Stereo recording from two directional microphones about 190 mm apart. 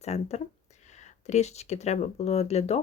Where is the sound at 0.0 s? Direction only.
35° left (ahead or behind).